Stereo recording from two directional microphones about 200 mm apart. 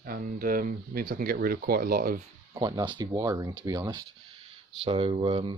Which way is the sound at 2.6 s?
20° right (ahead or behind).